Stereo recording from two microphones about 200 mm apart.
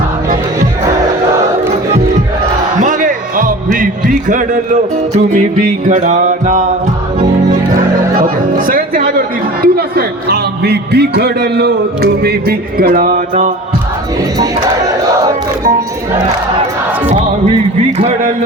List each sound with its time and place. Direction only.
2.8 s music: 40° right (ahead or behind)
8.1 s speech: 40° right (ahead or behind)
17.9 s music: 30° right (ahead or behind)